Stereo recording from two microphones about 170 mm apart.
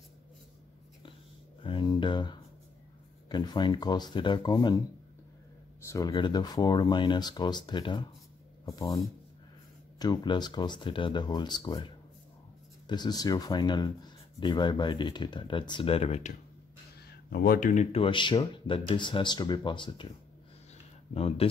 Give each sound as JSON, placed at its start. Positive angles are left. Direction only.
{"t": 1.6, "sound": "speech", "side_deg": 30}
{"t": 5.9, "sound": "speech", "side_deg": 20}
{"t": 17.3, "sound": "speech", "side_deg": 65}
{"t": 17.9, "sound": "speech", "side_deg": 30}
{"t": 21.1, "sound": "speech", "side_deg": 35}